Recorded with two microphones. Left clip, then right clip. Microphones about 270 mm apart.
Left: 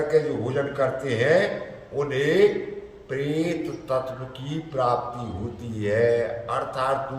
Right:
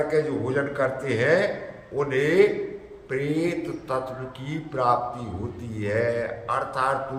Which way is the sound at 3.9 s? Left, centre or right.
Centre.